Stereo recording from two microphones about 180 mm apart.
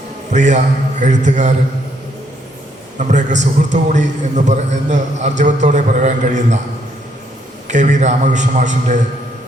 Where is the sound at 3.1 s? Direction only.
40° right (ahead or behind).